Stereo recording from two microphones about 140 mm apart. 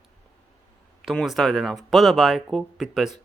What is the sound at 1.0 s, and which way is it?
Speech, centre (ahead or behind).